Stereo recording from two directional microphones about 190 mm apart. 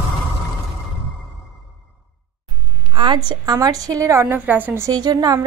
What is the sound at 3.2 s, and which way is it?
A woman's voice, 20° right (ahead or behind).